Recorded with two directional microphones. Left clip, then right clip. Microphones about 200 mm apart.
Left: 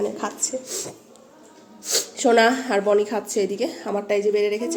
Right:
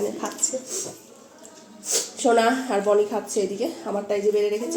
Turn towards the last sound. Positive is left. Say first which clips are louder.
# left 1 dB
turn(degrees=10)  # may be behind; listen again after turning